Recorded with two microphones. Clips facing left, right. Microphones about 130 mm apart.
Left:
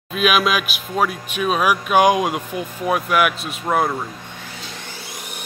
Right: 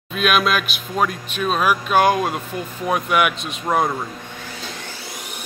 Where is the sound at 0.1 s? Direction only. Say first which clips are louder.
Left 1 dB; 5° left (ahead or behind).